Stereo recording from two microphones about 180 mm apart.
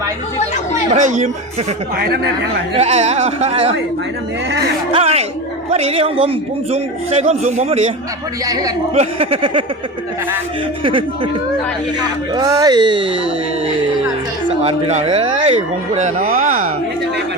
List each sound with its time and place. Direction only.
0.9 s a man's voice: 40° right (ahead or behind)
2.7 s a man's voice: 35° right (ahead or behind)
4.9 s a man's voice: 35° right (ahead or behind)
8.4 s speech: 20° right (ahead or behind)
9.0 s a man's voice: 30° right (ahead or behind)
10.8 s speech: 30° right (ahead or behind)
12.3 s speech: 20° right (ahead or behind)
14.6 s a man's voice: 35° right (ahead or behind)